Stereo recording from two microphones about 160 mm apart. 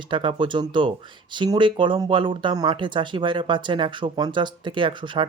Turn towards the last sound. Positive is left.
turn(degrees=-30)  # may be behind; listen again after turning